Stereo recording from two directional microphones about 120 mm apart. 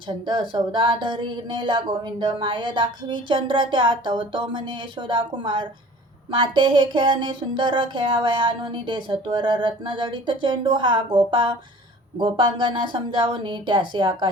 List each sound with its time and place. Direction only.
0.1 s speech: 40° right (ahead or behind)
6.3 s a sound: 45° right (ahead or behind)
12.1 s speech: 40° right (ahead or behind)